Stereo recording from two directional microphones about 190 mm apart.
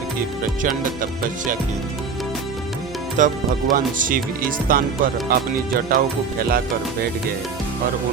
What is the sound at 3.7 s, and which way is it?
Speech, 45° right (ahead or behind).